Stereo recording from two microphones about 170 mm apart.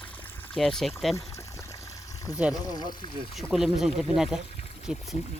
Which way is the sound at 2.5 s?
25° left (ahead or behind).